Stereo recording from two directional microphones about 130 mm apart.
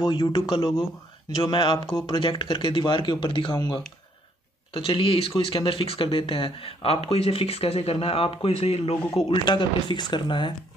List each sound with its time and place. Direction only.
0.1 s speech: 40° left (ahead or behind)